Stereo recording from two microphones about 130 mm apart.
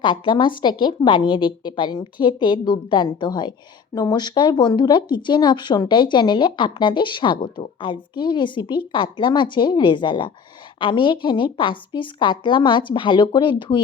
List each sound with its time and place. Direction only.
0.0 s speech: 35° left (ahead or behind)